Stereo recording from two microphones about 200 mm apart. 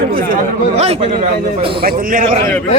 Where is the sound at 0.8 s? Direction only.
35° right (ahead or behind).